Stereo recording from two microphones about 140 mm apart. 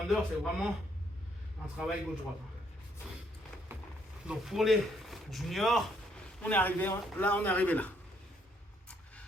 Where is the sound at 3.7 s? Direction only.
15° right (ahead or behind).